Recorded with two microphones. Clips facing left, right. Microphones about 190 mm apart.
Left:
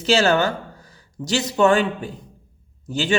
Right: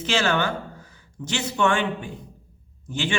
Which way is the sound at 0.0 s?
40° left (ahead or behind).